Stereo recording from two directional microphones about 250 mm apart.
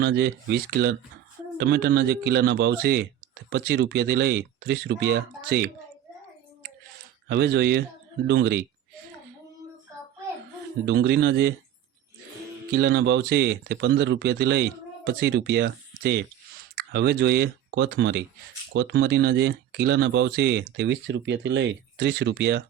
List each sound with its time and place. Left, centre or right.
0.0 s speech: right
7.3 s speech: right
10.8 s speech: right
12.7 s speech: right